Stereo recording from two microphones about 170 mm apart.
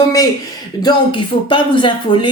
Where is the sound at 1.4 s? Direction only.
30° left (ahead or behind).